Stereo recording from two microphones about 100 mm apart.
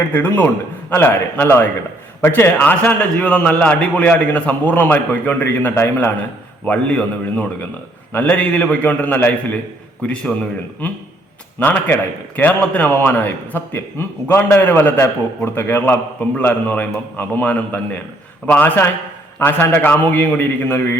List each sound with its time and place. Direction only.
0.1 s a man's voice: 20° left (ahead or behind)